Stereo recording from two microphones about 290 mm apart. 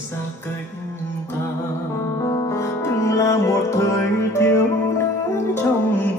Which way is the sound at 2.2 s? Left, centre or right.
Centre.